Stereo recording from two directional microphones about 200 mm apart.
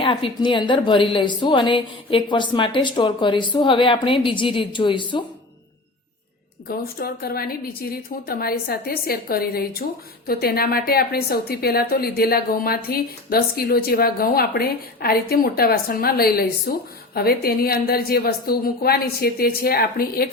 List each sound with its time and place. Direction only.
0.0 s a woman's voice: 25° left (ahead or behind)
6.7 s a woman's voice: 50° left (ahead or behind)